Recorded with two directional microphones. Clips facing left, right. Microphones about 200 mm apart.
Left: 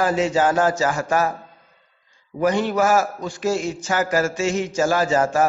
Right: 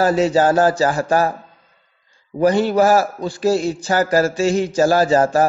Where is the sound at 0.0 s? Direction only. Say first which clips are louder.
Right 4 dB; 35° right (ahead or behind).